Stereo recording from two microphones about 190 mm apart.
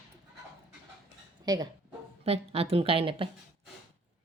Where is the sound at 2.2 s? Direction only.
30° right (ahead or behind).